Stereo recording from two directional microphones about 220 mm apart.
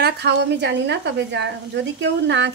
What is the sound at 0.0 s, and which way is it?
Speech, 50° right (ahead or behind).